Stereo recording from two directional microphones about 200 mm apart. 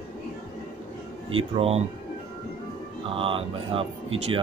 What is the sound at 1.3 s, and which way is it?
Speech, 30° right (ahead or behind).